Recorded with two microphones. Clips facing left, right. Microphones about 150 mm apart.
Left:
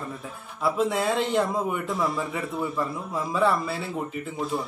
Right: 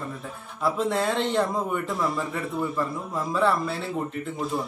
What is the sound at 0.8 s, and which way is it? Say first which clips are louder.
A man's voice: left 1 dB; centre (ahead or behind).